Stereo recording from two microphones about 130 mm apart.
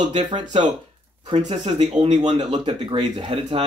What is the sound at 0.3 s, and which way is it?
Speech, 35° right (ahead or behind).